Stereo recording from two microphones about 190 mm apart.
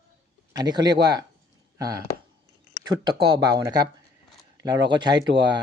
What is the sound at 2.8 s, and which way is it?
Speech, 20° right (ahead or behind).